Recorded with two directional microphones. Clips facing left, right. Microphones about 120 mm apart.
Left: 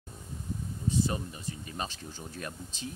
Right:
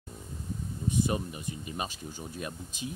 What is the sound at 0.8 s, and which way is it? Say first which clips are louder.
Speech: right 1 dB; 15° right (ahead or behind).